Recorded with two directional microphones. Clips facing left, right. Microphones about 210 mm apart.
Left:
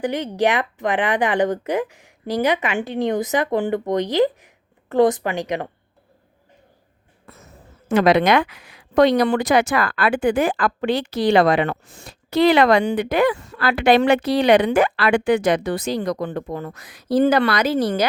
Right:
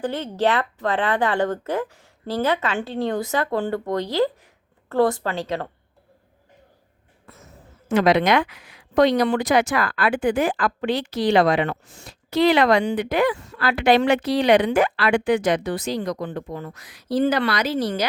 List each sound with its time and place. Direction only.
0.0 s speech: 15° left (ahead or behind)
7.9 s speech: 55° left (ahead or behind)